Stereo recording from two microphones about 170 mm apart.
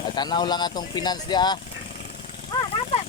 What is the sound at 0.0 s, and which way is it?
Speech, 25° left (ahead or behind).